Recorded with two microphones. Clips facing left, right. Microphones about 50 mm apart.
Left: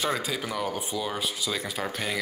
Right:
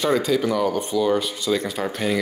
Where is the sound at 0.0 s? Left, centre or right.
Centre.